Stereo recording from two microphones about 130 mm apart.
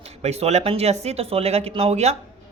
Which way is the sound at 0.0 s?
55° right (ahead or behind).